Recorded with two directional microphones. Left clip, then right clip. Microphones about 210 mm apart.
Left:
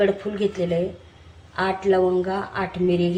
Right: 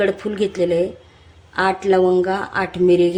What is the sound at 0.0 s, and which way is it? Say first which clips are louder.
Speech: right 2 dB; 50° right (ahead or behind).